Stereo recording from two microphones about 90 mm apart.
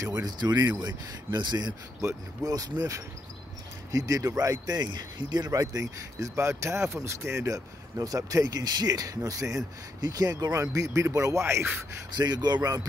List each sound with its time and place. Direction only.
0.0 s speech: 45° right (ahead or behind)
2.4 s speech: 45° right (ahead or behind)
12.2 s speech: 50° right (ahead or behind)